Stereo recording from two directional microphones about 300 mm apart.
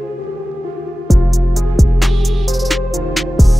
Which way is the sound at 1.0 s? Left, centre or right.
Centre.